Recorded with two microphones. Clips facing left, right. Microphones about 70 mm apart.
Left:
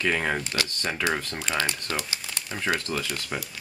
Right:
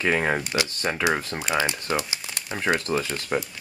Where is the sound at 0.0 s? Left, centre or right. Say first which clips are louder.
Right 3 dB; centre.